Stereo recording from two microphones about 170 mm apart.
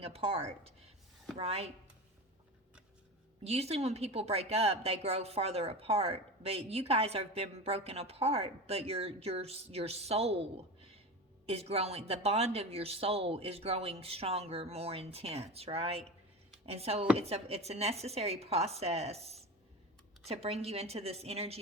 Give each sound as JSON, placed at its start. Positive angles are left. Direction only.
{"t": 0.0, "sound": "a woman's voice", "side_deg": -35}
{"t": 3.4, "sound": "a woman's voice", "side_deg": -40}
{"t": 11.4, "sound": "a woman's voice", "side_deg": -35}